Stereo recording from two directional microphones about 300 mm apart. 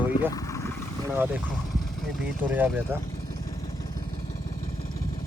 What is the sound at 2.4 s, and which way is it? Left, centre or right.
Speech, centre.